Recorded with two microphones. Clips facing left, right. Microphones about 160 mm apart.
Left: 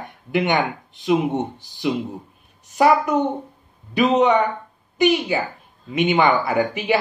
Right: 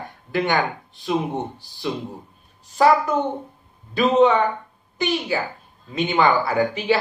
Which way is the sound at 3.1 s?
20° left (ahead or behind).